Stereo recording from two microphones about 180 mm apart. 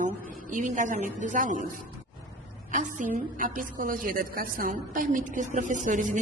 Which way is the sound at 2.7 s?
45° right (ahead or behind).